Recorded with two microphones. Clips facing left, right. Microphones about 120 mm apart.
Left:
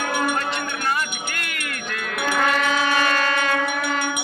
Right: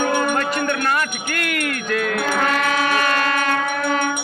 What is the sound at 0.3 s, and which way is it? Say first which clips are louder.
Music: right 5 dB; 60° right (ahead or behind).